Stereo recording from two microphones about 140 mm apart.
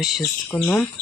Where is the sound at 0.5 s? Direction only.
15° left (ahead or behind).